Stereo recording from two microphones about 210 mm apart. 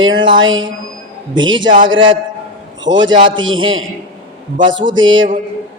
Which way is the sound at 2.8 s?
60° right (ahead or behind).